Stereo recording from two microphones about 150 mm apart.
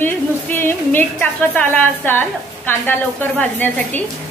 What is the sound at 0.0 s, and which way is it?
A woman's voice, 15° left (ahead or behind).